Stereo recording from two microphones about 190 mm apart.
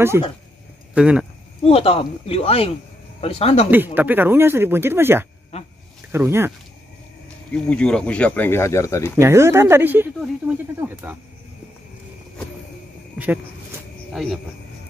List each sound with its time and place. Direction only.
0.9 s speech: 5° right (ahead or behind)
1.7 s speech: 30° left (ahead or behind)
3.7 s speech: 10° right (ahead or behind)
7.5 s speech: 5° left (ahead or behind)
9.2 s speech: 15° right (ahead or behind)
13.2 s a sound: 10° right (ahead or behind)